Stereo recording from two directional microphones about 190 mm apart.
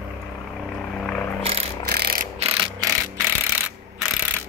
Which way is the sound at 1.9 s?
55° right (ahead or behind).